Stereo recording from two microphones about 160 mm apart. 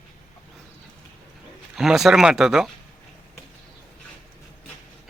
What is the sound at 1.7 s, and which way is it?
Speech, centre (ahead or behind).